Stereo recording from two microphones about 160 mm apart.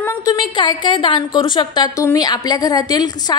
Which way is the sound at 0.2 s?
25° left (ahead or behind).